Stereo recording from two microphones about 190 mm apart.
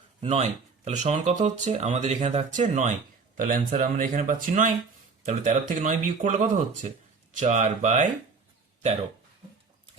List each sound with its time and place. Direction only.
0.2 s speech: 35° right (ahead or behind)